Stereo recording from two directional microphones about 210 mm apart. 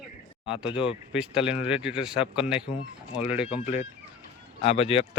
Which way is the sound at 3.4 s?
25° left (ahead or behind).